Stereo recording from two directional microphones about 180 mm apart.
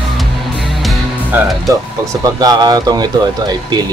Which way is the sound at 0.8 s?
Centre (ahead or behind).